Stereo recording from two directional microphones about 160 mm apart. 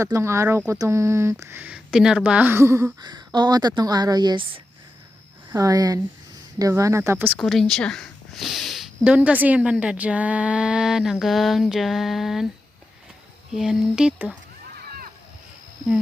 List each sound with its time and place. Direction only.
0.0 s speech: 15° right (ahead or behind)
7.3 s speech: centre (ahead or behind)
13.5 s speech: 5° right (ahead or behind)
14.8 s a sound: 65° right (ahead or behind)